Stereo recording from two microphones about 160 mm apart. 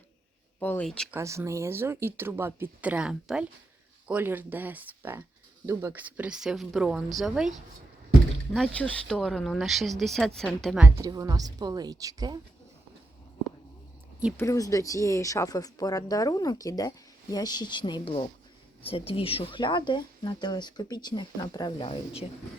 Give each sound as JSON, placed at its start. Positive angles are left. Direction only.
{"t": 0.6, "sound": "speech", "side_deg": 10}
{"t": 1.1, "sound": "speech", "side_deg": -20}
{"t": 8.5, "sound": "speech", "side_deg": 5}
{"t": 10.8, "sound": "speech", "side_deg": -15}
{"t": 14.3, "sound": "speech", "side_deg": 20}